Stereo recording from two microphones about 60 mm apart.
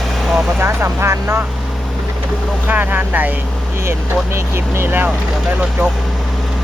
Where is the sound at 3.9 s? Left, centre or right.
Right.